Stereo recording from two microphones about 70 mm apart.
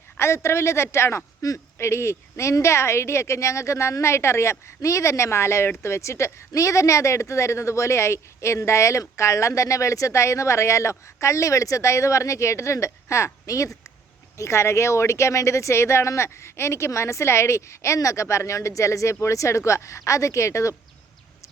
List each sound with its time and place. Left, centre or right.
0.2 s a man's voice: left